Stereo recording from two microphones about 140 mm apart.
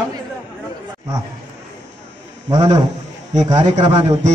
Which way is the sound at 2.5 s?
25° right (ahead or behind).